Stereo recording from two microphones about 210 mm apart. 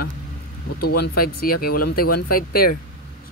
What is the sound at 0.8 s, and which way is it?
Speech, 45° left (ahead or behind).